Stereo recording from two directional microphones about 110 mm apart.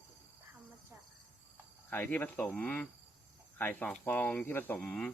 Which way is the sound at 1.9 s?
15° left (ahead or behind).